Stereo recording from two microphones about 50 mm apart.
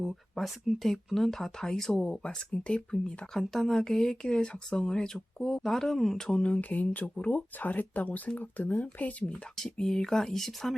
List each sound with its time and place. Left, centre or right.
0.0 s speech: centre
6.3 s speech: left
9.2 s speech: centre